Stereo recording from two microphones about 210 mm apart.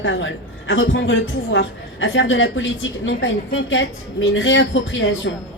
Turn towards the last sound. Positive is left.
turn(degrees=65)  # may be behind; listen again after turning